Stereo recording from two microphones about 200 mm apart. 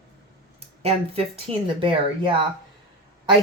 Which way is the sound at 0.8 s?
30° right (ahead or behind).